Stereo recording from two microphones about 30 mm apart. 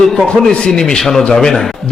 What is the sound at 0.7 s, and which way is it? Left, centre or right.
A man's voice, centre.